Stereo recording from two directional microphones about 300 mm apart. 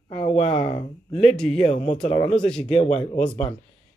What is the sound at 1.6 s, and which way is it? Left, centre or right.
Speech, left.